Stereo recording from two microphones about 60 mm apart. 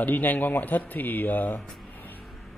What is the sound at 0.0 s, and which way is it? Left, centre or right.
Speech, left.